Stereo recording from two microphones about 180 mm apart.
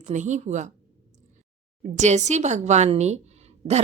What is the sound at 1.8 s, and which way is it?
A woman's voice, 40° right (ahead or behind).